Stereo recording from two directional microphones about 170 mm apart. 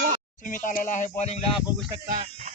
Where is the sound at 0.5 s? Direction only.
50° left (ahead or behind).